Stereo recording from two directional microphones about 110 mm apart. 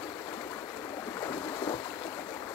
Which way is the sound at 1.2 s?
35° left (ahead or behind).